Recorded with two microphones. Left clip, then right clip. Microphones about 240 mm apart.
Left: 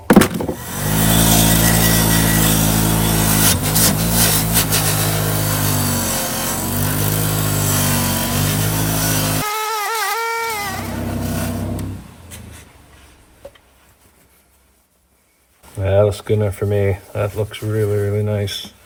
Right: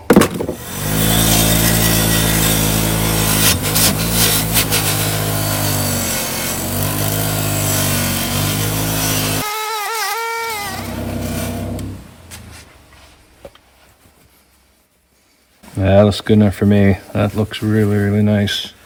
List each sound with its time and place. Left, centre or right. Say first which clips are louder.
0.1 s vehicle: right 1 dB; centre
15.8 s speech: right 3 dB; right